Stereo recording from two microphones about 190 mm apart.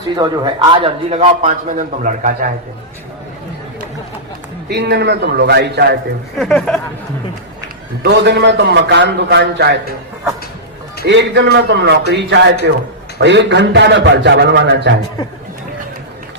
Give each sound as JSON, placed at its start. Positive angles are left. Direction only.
{"t": 0.2, "sound": "a man's voice", "side_deg": -25}
{"t": 2.0, "sound": "a man's voice", "side_deg": -45}
{"t": 4.7, "sound": "a man's voice", "side_deg": -60}
{"t": 6.4, "sound": "speech", "side_deg": 0}
{"t": 8.0, "sound": "a man's voice", "side_deg": -60}
{"t": 11.0, "sound": "a man's voice", "side_deg": -65}